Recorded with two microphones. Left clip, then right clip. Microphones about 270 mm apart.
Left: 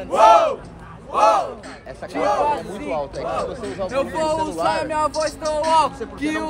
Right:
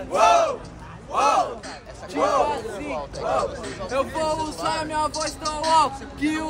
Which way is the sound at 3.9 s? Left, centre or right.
Centre.